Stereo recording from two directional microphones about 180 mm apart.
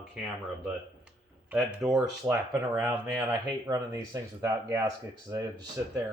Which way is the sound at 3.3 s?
20° right (ahead or behind).